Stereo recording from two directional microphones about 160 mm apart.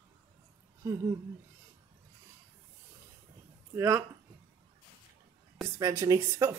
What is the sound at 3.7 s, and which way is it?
Speech, 20° right (ahead or behind).